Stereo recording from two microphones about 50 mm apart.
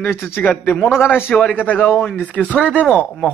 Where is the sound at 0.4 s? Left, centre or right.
Left.